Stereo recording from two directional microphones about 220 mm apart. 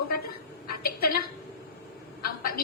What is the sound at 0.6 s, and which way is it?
Speech, 45° left (ahead or behind).